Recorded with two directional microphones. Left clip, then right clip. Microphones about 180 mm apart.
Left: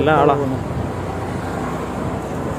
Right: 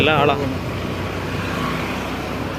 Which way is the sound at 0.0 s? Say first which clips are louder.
Left 2 dB; 15° left (ahead or behind).